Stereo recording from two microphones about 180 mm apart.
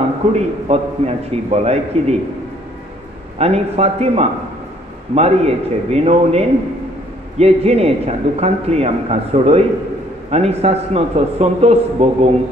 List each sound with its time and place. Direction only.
0.3 s a man's voice: 35° right (ahead or behind)
3.3 s a man's voice: 35° right (ahead or behind)